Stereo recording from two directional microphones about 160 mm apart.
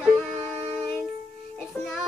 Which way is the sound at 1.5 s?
10° left (ahead or behind).